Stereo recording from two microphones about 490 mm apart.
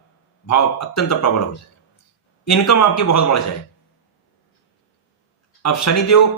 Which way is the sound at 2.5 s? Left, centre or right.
Left.